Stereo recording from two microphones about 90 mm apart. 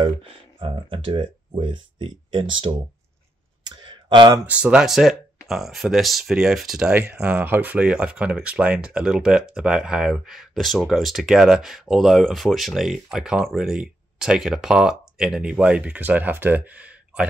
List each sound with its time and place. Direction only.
0.0 s speech: 80° right
3.6 s clicking: 60° right (ahead or behind)
4.5 s speech: 10° right (ahead or behind)